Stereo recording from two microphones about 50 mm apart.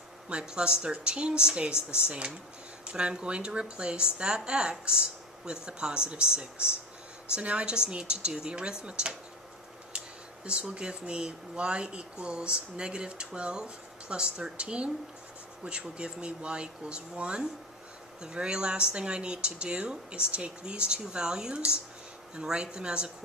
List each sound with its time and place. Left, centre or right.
0.3 s speech: centre
10.4 s a woman's voice: right